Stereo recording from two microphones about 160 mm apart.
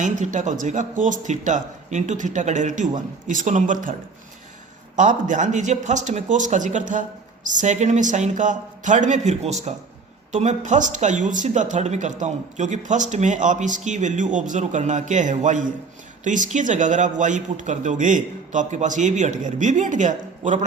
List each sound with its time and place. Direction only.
0.0 s a man's voice: 50° right (ahead or behind)
4.9 s a man's voice: 50° right (ahead or behind)